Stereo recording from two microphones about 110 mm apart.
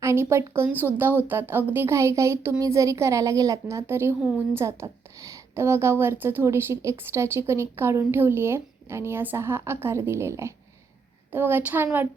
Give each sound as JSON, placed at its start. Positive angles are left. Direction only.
{"t": 0.0, "sound": "a woman's voice", "side_deg": -25}